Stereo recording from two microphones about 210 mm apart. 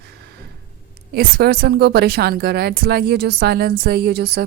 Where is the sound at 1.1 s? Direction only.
50° right (ahead or behind).